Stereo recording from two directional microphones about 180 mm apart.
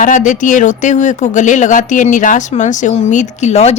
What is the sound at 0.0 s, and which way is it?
A woman's voice, 45° left (ahead or behind).